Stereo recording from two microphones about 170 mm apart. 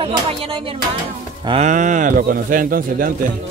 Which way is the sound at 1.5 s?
45° right (ahead or behind).